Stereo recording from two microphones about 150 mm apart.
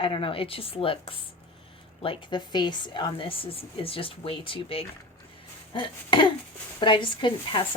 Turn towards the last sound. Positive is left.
turn(degrees=35)  # may be behind; listen again after turning